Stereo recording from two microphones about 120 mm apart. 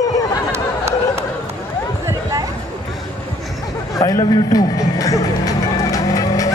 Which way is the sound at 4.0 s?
30° left (ahead or behind).